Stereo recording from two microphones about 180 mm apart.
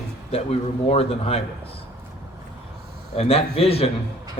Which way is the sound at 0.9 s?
35° left (ahead or behind).